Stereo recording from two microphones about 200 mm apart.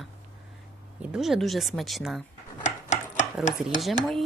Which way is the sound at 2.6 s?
35° left (ahead or behind).